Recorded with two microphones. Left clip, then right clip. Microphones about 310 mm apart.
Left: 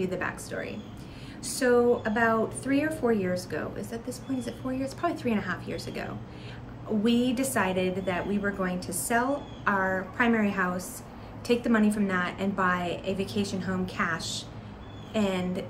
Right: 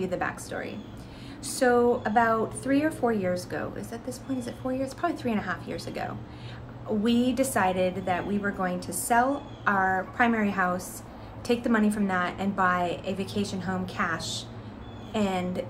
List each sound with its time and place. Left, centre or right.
0.0 s a woman's voice: centre